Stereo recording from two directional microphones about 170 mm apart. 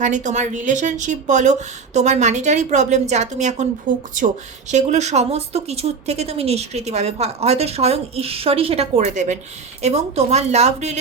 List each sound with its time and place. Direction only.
0.0 s speech: 45° right (ahead or behind)
4.7 s speech: 45° right (ahead or behind)